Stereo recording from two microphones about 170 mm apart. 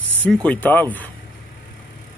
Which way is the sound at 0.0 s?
10° right (ahead or behind).